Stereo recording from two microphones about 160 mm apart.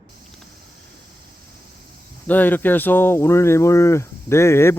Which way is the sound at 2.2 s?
10° left (ahead or behind).